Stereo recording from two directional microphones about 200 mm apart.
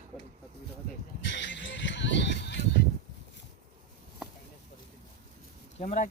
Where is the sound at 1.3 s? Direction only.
65° left (ahead or behind).